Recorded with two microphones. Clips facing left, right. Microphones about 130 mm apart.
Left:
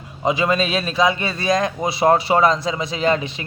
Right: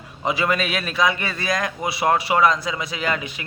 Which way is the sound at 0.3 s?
20° left (ahead or behind).